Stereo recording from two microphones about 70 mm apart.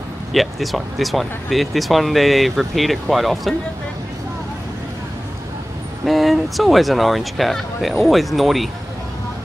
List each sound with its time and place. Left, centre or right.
0.3 s speech: centre
6.0 s speech: centre